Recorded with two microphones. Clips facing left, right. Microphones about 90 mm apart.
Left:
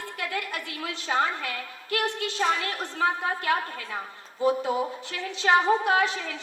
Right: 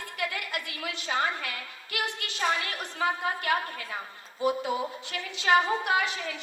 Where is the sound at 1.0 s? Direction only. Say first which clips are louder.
Left 3 dB; 20° left (ahead or behind).